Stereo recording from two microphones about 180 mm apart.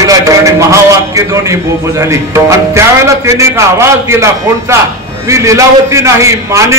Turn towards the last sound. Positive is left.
turn(degrees=-15)  # may be behind; listen again after turning